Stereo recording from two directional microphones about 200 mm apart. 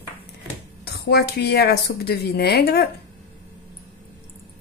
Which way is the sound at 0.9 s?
50° left (ahead or behind).